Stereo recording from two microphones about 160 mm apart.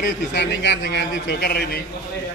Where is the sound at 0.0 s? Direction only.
85° left.